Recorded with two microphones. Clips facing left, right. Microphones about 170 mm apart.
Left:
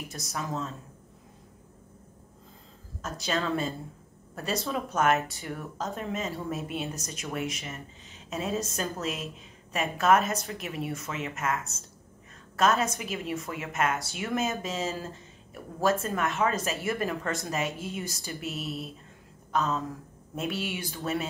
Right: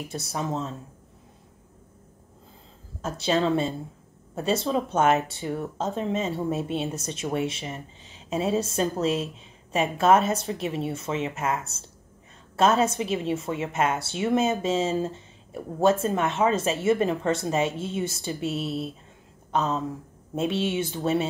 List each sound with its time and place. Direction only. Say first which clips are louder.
0.1 s speech: right 5 dB; 30° right (ahead or behind)
3.0 s speech: right 7 dB; 30° right (ahead or behind)
19.5 s a sound: right 3 dB; 35° right (ahead or behind)
20.3 s speech: right 7 dB; 25° right (ahead or behind)